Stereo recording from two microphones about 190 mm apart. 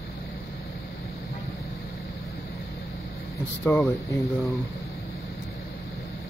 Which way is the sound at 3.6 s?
10° left (ahead or behind).